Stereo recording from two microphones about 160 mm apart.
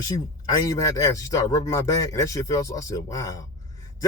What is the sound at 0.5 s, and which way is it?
Speech, 20° left (ahead or behind).